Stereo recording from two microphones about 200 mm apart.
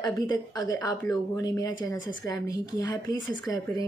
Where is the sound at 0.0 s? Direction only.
20° left (ahead or behind).